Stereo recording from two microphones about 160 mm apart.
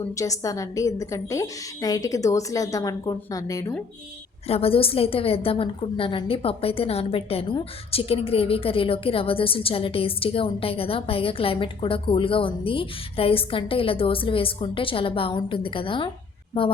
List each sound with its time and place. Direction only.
0.2 s a woman's voice: 20° left (ahead or behind)
4.4 s a woman's voice: 35° left (ahead or behind)